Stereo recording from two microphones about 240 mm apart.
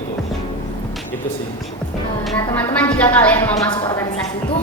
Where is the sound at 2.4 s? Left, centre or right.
Centre.